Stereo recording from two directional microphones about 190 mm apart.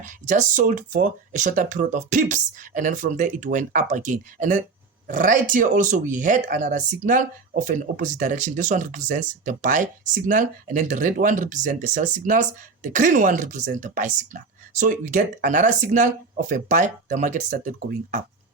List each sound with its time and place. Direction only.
0.0 s speech: 40° right (ahead or behind)